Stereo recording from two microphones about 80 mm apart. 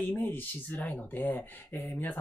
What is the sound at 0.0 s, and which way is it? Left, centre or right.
Speech, left.